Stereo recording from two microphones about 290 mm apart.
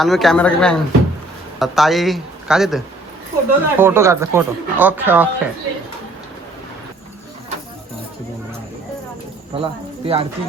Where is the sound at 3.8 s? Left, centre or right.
Centre.